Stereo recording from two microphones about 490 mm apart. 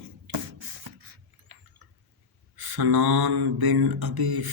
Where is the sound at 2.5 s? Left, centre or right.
Right.